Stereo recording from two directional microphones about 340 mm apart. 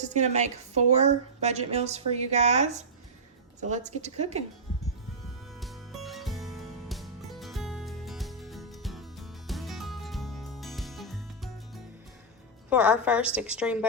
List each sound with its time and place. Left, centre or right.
0.1 s a woman's voice: centre
5.5 s music: centre
12.7 s a woman's voice: centre